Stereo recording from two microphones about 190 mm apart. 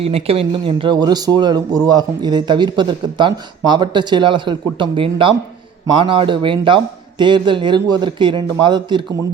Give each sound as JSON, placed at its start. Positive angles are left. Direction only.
{"t": 0.0, "sound": "speech", "side_deg": -30}